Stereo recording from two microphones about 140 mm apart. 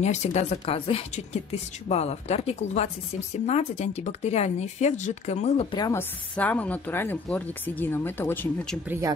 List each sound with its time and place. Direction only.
0.0 s a woman's voice: 55° left (ahead or behind)
5.7 s speech: 30° left (ahead or behind)
5.9 s speech: 10° left (ahead or behind)
8.8 s speech: 15° right (ahead or behind)